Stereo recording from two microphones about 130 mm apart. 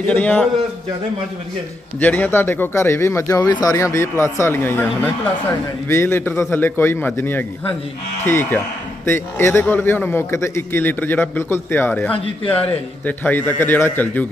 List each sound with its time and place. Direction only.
0.0 s a man's voice: 10° left (ahead or behind)
2.0 s a man's voice: 15° left (ahead or behind)
3.3 s a man's voice: 30° left (ahead or behind); by 14.2 s 15° left (ahead or behind)